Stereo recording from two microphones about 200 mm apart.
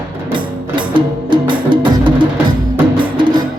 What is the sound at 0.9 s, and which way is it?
Music, 25° right (ahead or behind).